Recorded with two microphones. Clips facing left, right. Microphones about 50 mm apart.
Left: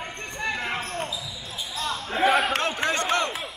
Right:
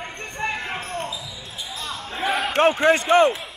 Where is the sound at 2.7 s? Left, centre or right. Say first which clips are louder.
Right 8 dB; right.